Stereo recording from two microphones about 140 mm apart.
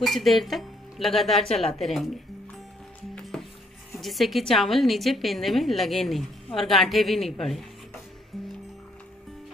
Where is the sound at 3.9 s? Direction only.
Centre (ahead or behind).